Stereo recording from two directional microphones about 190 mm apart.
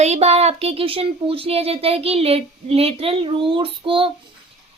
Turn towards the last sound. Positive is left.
turn(degrees=-30)  # may be behind; listen again after turning